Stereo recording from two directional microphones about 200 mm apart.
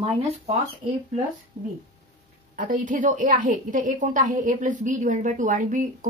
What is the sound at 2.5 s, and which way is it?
A woman's voice, 40° right (ahead or behind).